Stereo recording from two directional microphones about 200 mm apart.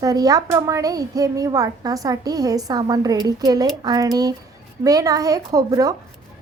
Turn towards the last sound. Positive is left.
turn(degrees=-15)  # may be behind; listen again after turning